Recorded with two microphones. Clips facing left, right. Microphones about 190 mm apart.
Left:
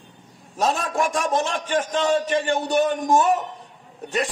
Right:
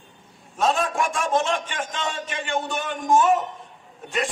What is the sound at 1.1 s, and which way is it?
A man's voice, 40° left (ahead or behind).